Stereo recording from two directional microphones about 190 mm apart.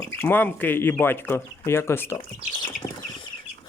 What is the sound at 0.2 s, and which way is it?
Speech, 10° left (ahead or behind).